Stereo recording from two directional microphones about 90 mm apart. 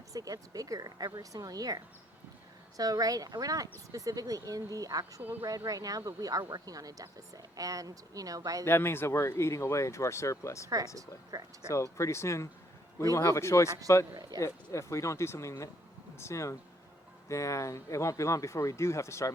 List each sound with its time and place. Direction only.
0.1 s speech: 40° right (ahead or behind)
5.2 s speech: 25° right (ahead or behind)
5.5 s speech: 40° right (ahead or behind)
8.6 s speech: 25° left (ahead or behind)
10.9 s speech: 40° right (ahead or behind)
11.7 s speech: 35° left (ahead or behind)
14.2 s speech: 45° right (ahead or behind)
14.4 s speech: 35° left (ahead or behind)